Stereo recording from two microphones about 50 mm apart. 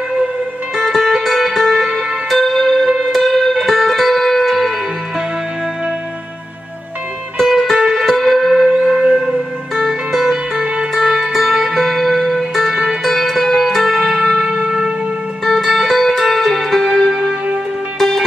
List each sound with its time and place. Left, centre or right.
0.7 s music: centre
7.3 s music: centre
14.5 s music: centre
15.4 s music: centre